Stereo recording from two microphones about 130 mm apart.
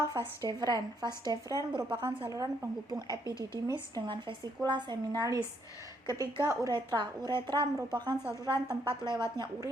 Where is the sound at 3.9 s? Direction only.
35° right (ahead or behind).